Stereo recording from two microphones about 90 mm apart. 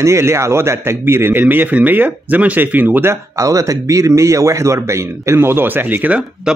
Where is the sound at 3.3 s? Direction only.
35° right (ahead or behind); by 6.5 s 15° right (ahead or behind).